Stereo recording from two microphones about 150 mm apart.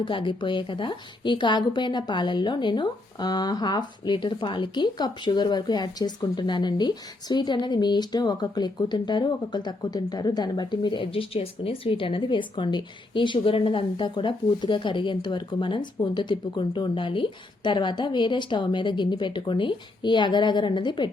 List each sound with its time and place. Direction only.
0.0 s a woman's voice: 35° left (ahead or behind)